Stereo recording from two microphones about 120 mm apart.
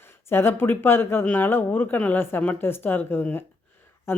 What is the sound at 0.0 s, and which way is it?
Speech, 20° left (ahead or behind).